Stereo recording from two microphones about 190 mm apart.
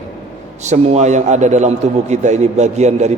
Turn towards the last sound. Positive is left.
turn(degrees=-35)  # may be behind; listen again after turning